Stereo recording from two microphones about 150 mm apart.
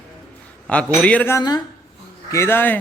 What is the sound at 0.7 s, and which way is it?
Speech, 10° left (ahead or behind).